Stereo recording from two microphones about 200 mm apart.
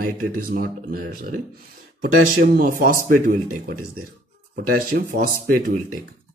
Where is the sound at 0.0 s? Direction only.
45° right (ahead or behind).